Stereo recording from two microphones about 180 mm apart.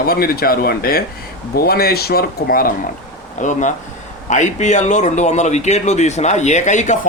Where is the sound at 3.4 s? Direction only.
40° left (ahead or behind).